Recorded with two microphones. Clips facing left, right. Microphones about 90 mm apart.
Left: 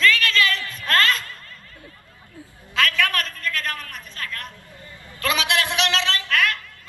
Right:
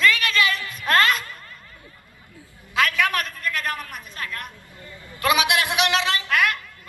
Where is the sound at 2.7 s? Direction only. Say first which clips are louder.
Right 1 dB; 15° right (ahead or behind).